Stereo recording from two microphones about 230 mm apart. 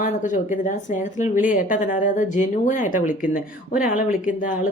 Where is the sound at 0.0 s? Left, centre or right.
Left.